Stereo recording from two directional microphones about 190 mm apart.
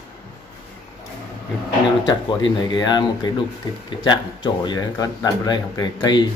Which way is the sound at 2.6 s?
20° left (ahead or behind).